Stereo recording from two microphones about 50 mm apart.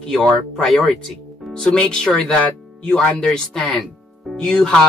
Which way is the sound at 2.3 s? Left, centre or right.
Left.